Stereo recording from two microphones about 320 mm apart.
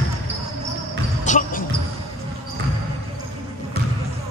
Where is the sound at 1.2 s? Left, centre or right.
Left.